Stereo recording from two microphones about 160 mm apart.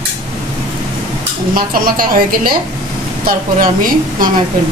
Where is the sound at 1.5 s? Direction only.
65° right (ahead or behind).